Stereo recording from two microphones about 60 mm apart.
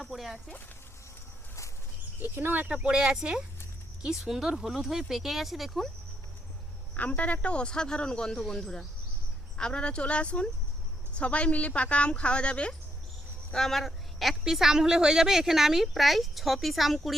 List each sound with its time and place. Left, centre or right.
0.0 s a sound: centre
2.1 s a woman's voice: right; by 5.9 s centre
6.9 s speech: left
13.5 s a woman's voice: centre